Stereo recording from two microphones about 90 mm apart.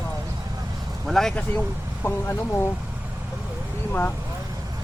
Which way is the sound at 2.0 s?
25° left (ahead or behind).